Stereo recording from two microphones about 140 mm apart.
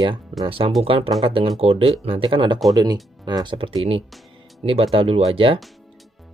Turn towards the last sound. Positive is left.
turn(degrees=-40)  # may be behind; listen again after turning